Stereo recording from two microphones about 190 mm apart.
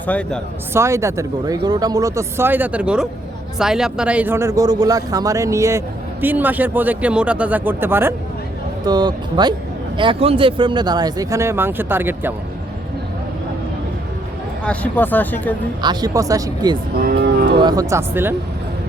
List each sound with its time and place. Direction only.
0.0 s speech: 5° left (ahead or behind)
0.7 s speech: 15° right (ahead or behind)
8.8 s speech: 20° right (ahead or behind)
14.6 s speech: 5° left (ahead or behind)
15.8 s speech: 20° right (ahead or behind)
16.9 s moo: 55° right (ahead or behind)
17.6 s speech: 20° right (ahead or behind)